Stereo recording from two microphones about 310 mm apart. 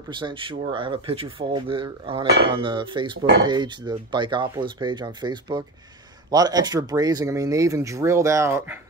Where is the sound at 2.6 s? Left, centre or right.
Centre.